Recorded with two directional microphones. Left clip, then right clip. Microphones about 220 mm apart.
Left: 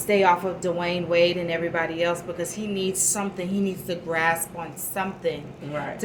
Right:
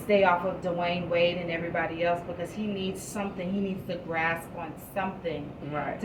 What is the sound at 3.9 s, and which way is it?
Speech, 55° left (ahead or behind).